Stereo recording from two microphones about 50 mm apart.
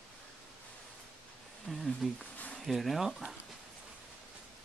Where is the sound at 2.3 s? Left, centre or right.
Left.